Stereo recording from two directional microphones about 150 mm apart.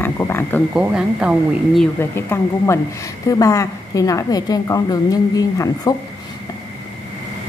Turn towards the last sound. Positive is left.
turn(degrees=25)  # may be behind; listen again after turning